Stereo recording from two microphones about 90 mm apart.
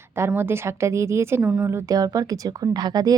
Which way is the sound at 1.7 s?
30° right (ahead or behind).